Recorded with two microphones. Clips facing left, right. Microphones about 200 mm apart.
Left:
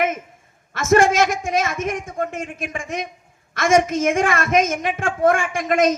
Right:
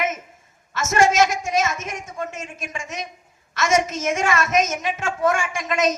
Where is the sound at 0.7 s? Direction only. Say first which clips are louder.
Left 3 dB; 55° left (ahead or behind).